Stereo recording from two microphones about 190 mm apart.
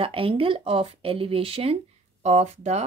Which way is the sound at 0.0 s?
30° right (ahead or behind).